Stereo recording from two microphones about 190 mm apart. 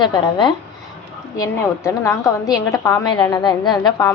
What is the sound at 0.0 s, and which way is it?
A woman's voice, 25° left (ahead or behind).